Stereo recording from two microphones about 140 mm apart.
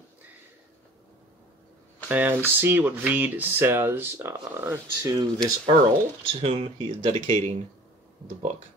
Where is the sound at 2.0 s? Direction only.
10° right (ahead or behind).